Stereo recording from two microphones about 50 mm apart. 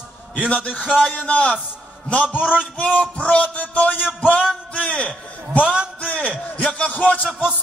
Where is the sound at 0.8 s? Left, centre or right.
Centre.